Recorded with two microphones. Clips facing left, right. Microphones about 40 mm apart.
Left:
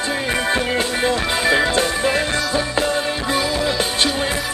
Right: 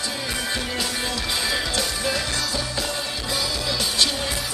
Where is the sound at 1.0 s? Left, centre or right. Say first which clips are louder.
Left 8 dB; left.